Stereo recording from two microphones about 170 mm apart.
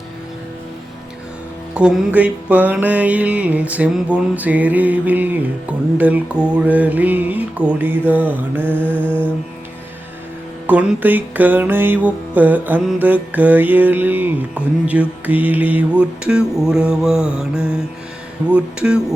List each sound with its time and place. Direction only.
1.7 s music: 5° right (ahead or behind)
8.8 s mantra: 10° left (ahead or behind)
10.7 s music: 10° right (ahead or behind)
18.4 s speech: 5° right (ahead or behind)